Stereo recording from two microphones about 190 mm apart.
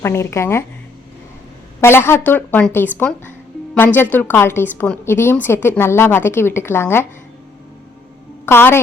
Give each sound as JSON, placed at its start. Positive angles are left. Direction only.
{"t": 0.0, "sound": "a woman's voice", "side_deg": 15}
{"t": 1.8, "sound": "a woman's voice", "side_deg": 10}
{"t": 8.4, "sound": "a woman's voice", "side_deg": 10}